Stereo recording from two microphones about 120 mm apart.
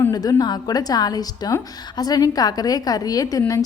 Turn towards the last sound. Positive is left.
turn(degrees=30)  # may be behind; listen again after turning